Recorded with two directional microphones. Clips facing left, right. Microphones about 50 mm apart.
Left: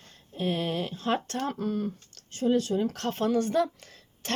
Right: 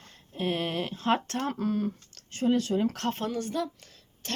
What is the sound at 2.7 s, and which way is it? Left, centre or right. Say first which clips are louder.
Speech: right 1 dB; right.